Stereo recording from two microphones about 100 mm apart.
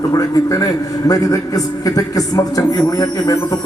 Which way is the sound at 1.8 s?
35° left (ahead or behind).